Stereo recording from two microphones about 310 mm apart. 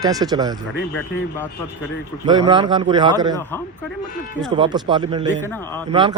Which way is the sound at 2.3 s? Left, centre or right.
Centre.